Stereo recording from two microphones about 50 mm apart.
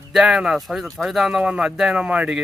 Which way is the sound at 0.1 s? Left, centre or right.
Centre.